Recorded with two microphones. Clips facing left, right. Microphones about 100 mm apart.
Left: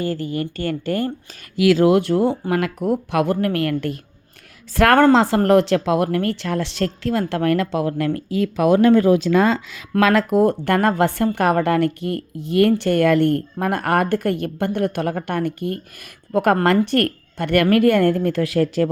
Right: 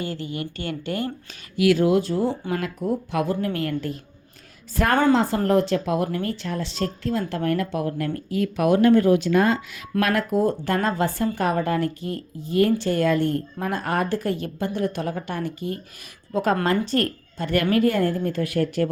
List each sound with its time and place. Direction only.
0.0 s speech: 45° left (ahead or behind)
1.5 s a woman's voice: 90° left; by 2.3 s 65° left (ahead or behind)
2.5 s a woman's voice: 80° left
4.7 s speech: 85° left
9.9 s speech: 90° left
10.7 s a woman's voice: 60° left (ahead or behind); by 18.8 s 90° left